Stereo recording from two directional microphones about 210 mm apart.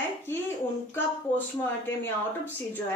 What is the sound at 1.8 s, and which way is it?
Speech, 10° left (ahead or behind).